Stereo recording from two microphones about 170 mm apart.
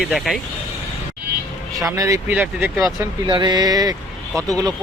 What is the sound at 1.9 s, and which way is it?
Speech, 20° right (ahead or behind).